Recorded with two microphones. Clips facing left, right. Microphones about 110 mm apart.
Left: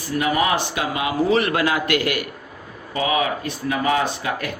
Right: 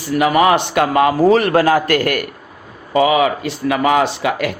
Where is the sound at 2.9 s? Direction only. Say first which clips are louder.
Right 8 dB; 90° right.